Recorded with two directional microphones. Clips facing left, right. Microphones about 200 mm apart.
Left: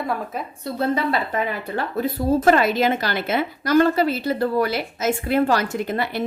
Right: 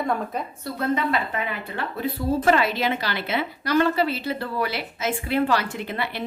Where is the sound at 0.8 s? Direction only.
35° left (ahead or behind).